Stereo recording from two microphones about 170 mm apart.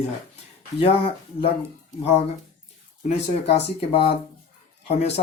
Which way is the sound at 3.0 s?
40° left (ahead or behind).